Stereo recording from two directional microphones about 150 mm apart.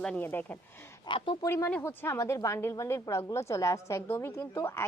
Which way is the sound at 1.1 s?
35° left (ahead or behind).